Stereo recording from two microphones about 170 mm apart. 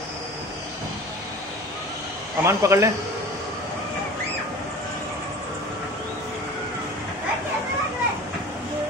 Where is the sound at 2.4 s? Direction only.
15° right (ahead or behind).